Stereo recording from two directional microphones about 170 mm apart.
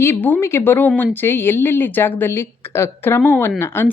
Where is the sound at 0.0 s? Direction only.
15° left (ahead or behind).